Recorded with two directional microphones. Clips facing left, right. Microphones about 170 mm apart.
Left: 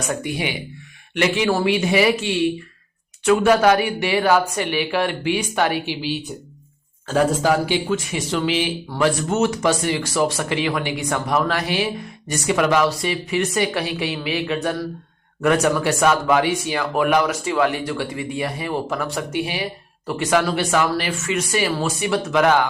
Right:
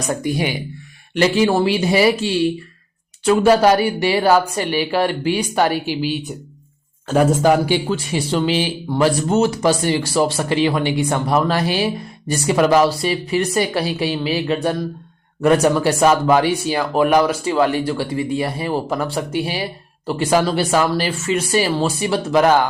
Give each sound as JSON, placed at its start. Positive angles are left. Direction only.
{"t": 0.2, "sound": "speech", "side_deg": -40}
{"t": 7.9, "sound": "speech", "side_deg": -30}